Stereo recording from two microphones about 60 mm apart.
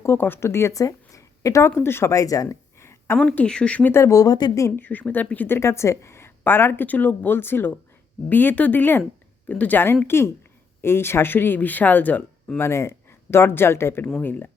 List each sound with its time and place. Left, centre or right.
0.2 s speech: left
0.4 s speech: left
0.8 s speech: left
1.8 s speech: left
2.1 s speech: left
2.7 s a sound: left
3.3 s speech: centre
4.1 s speech: left
4.8 s speech: left
5.5 s a woman's voice: left
6.8 s speech: left
10.1 s speech: left
12.5 s speech: left